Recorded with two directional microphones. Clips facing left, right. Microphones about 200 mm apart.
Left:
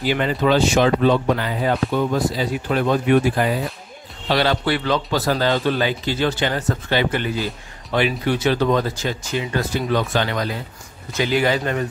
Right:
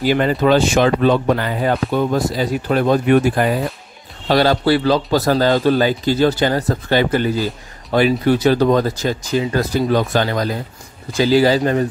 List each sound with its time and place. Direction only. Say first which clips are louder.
0.0 s speech: right 4 dB; 45° right (ahead or behind)
4.3 s a man's voice: right 5 dB; 40° right (ahead or behind)